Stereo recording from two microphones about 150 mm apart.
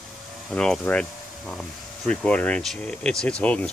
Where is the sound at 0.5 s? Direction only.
5° left (ahead or behind).